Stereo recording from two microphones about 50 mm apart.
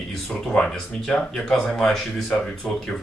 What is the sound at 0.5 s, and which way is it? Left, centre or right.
Speech, centre.